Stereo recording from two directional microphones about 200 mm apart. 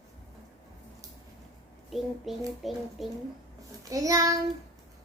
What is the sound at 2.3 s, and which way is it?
Speech, centre (ahead or behind).